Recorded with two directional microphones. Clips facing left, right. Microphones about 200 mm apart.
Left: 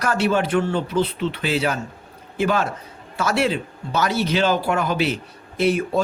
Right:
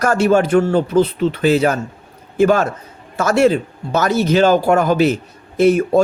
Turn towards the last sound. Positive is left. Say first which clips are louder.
# right 7 dB
turn(degrees=-45)  # may be behind; listen again after turning